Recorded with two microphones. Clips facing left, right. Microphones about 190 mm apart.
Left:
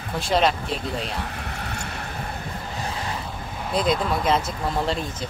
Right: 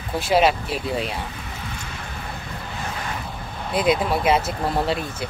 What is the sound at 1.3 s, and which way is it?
Vehicle, 65° left (ahead or behind).